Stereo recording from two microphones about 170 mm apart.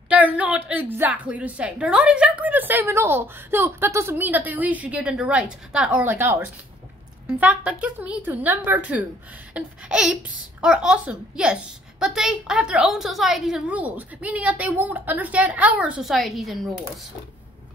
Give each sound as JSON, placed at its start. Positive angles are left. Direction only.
{"t": 0.1, "sound": "a woman's voice", "side_deg": -10}